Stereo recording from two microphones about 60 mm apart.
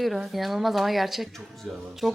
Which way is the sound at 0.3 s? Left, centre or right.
Centre.